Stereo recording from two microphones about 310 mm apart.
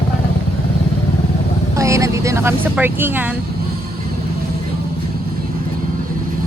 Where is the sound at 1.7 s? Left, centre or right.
Centre.